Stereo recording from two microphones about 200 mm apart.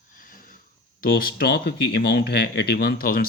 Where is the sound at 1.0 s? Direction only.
50° left (ahead or behind).